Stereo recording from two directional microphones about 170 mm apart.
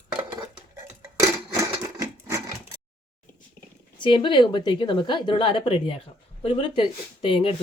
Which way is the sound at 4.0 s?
30° left (ahead or behind).